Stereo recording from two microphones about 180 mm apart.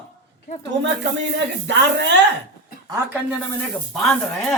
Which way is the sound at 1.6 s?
80° right.